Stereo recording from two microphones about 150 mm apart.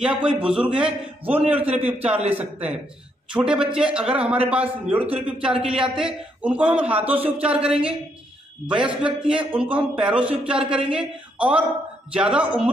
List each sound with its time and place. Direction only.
0.2 s a man's voice: 5° right (ahead or behind)